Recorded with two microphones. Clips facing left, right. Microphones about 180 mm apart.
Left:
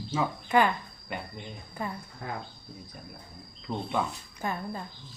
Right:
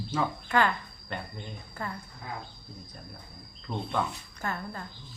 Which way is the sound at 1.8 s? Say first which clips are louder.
Left 2 dB; 15° left (ahead or behind).